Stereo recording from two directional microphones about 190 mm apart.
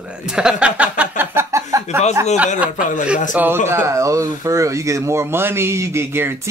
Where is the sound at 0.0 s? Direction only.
5° right (ahead or behind).